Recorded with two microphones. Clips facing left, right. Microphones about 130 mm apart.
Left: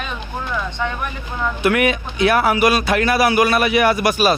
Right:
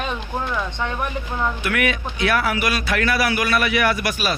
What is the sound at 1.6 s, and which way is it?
A man's voice, 25° left (ahead or behind).